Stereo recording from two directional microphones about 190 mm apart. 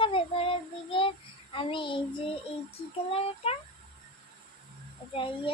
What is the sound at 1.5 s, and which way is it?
Speech, 25° left (ahead or behind).